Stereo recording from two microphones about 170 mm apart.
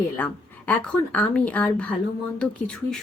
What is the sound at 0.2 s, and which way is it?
A woman's voice, 10° left (ahead or behind).